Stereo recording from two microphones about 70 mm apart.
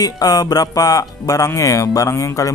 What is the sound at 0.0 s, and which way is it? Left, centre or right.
Speech, left.